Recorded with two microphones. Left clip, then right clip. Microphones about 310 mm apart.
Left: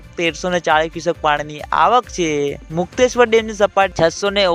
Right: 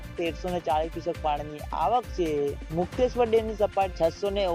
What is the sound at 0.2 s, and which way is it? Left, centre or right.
Speech, left.